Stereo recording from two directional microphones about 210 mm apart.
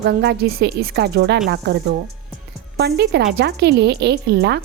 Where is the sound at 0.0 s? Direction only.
50° right (ahead or behind).